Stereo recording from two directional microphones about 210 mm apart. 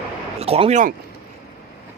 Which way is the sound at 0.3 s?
30° right (ahead or behind).